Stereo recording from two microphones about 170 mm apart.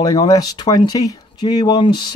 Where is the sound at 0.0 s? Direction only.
20° left (ahead or behind).